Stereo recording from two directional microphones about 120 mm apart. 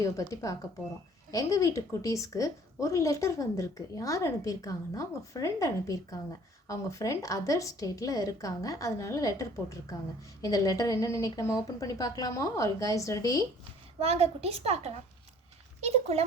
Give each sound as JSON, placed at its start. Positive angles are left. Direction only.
{"t": 0.0, "sound": "a woman's voice", "side_deg": 25}
{"t": 14.0, "sound": "a woman's voice", "side_deg": -60}